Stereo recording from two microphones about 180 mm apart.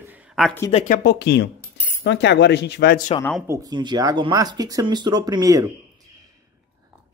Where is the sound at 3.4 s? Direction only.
20° right (ahead or behind).